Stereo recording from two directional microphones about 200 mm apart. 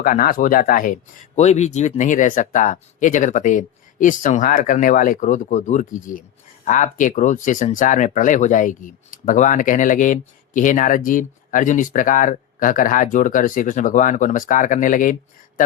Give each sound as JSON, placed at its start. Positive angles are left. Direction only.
{"t": 0.0, "sound": "speech", "side_deg": 45}